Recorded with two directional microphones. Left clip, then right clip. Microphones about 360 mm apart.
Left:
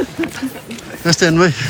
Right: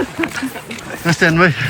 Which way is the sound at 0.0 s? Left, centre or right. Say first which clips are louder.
Right 1 dB; centre.